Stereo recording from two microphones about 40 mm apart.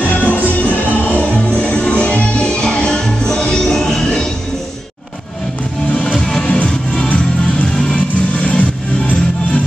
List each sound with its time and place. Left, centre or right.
0.1 s music: left
2.3 s music: centre
5.9 s music: left
7.9 s music: left